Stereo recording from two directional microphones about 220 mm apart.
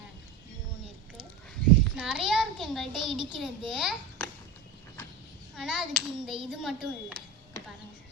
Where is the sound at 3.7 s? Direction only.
5° right (ahead or behind).